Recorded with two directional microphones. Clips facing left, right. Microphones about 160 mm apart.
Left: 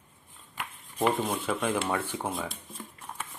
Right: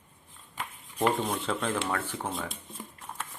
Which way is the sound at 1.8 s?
20° left (ahead or behind).